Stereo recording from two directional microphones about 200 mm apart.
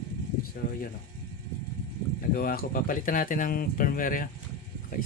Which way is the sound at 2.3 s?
45° left (ahead or behind).